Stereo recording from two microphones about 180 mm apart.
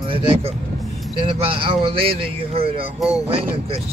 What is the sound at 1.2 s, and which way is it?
Speech, 30° right (ahead or behind).